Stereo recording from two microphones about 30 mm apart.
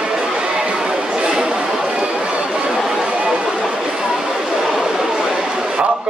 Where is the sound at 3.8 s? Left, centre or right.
Right.